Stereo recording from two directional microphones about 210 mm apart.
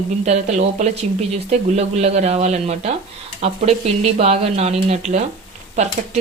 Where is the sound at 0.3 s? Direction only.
30° right (ahead or behind).